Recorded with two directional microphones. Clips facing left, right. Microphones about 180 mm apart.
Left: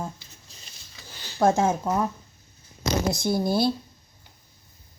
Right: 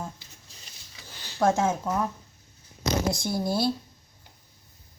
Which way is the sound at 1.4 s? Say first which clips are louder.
Left 2 dB; 30° left (ahead or behind).